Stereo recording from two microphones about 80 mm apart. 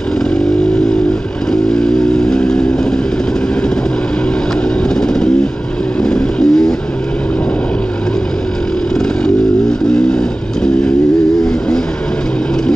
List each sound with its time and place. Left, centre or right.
2.2 s vehicle: centre
4.8 s guitar: centre
5.9 s vehicle: centre